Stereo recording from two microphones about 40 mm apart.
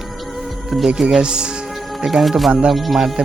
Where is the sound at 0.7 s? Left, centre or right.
Centre.